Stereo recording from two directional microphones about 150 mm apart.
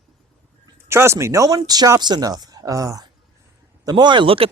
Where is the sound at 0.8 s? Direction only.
15° right (ahead or behind).